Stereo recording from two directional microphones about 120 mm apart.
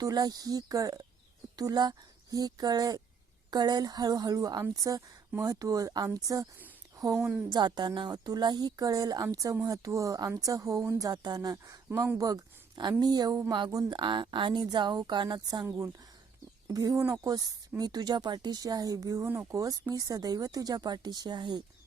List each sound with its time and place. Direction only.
0.0 s speech: 30° right (ahead or behind)
7.5 s speech: 35° right (ahead or behind)
16.6 s speech: 30° right (ahead or behind)